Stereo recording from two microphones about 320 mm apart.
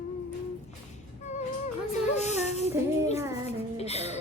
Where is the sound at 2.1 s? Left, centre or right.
Left.